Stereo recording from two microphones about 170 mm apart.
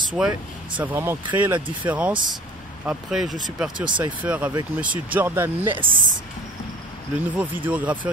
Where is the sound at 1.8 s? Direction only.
10° right (ahead or behind).